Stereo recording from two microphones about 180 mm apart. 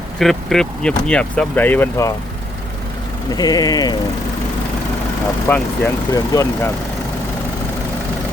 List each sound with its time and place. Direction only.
0.2 s speech: centre (ahead or behind)
3.3 s speech: 20° left (ahead or behind)
5.5 s speech: 10° left (ahead or behind)